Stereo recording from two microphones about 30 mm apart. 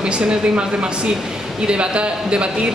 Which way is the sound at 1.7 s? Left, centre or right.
Right.